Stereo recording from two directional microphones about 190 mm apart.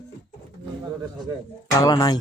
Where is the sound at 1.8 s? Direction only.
20° left (ahead or behind).